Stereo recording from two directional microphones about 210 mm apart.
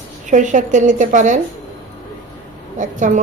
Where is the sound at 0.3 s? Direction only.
35° right (ahead or behind).